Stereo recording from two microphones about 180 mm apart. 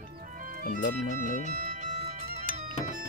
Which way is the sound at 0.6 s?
50° left (ahead or behind).